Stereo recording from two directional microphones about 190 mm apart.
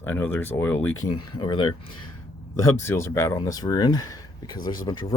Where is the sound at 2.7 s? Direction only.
15° left (ahead or behind).